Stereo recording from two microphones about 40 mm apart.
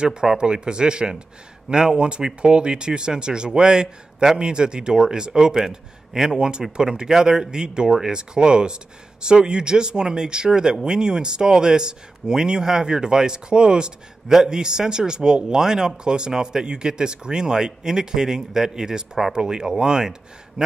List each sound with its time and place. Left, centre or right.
0.0 s speech: centre